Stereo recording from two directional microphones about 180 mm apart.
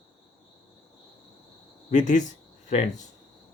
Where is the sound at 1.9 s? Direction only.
45° left (ahead or behind).